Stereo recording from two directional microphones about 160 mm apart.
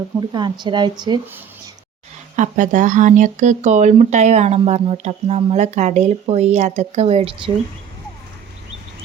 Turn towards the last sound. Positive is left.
turn(degrees=-35)  # may be behind; listen again after turning